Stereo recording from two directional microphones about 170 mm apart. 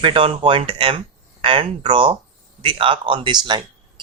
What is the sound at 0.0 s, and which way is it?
A man's voice, 30° right (ahead or behind).